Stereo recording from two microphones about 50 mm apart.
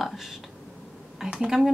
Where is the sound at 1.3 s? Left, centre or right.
Centre.